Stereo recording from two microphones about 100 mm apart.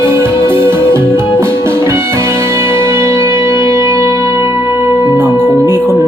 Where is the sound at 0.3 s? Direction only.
55° left (ahead or behind).